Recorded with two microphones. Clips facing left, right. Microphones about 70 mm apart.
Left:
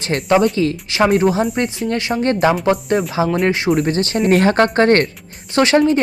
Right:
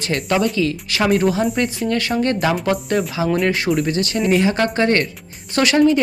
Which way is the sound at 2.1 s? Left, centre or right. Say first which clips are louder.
Left 1 dB; centre.